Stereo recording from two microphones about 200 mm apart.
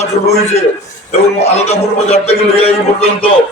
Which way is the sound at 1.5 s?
30° left (ahead or behind).